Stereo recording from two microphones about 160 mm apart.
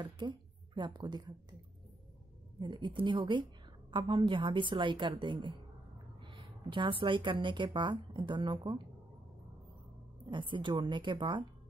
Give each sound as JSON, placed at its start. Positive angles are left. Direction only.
{"t": 0.0, "sound": "a woman's voice", "side_deg": -30}
{"t": 2.6, "sound": "a woman's voice", "side_deg": -30}
{"t": 10.3, "sound": "a woman's voice", "side_deg": -30}